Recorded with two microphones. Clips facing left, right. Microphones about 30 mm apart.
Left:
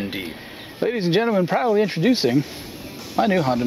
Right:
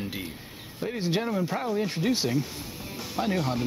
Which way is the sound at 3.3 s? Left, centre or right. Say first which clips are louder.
Left 7 dB; centre.